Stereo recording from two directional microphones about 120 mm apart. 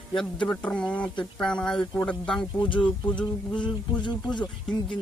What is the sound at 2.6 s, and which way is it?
Speech, 40° left (ahead or behind).